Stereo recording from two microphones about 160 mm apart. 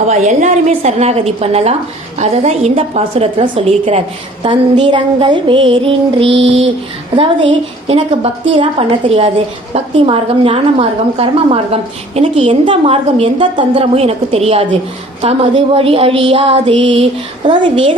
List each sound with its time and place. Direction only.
0.1 s a woman's voice: 45° right (ahead or behind)